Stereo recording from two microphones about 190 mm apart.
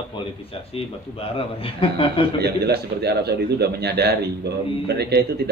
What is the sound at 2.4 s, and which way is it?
A man's voice, 60° right (ahead or behind).